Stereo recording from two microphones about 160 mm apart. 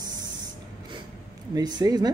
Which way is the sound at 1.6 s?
25° right (ahead or behind).